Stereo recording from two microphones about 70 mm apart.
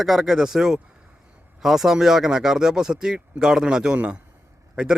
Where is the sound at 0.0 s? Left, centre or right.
Centre.